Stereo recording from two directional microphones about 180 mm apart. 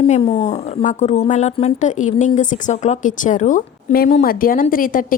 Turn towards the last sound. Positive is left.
turn(degrees=50)  # may be behind; listen again after turning